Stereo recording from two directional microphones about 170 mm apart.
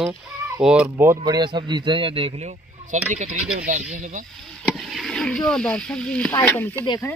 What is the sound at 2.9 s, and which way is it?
Speech, 45° right (ahead or behind).